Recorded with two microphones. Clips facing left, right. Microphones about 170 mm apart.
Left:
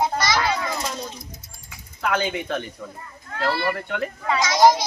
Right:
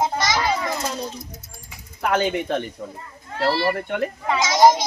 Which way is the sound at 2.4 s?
25° right (ahead or behind).